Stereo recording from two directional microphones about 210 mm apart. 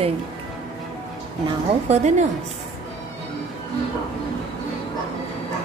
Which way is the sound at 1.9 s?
35° right (ahead or behind).